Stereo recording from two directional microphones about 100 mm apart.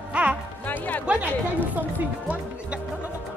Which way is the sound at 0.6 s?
15° left (ahead or behind).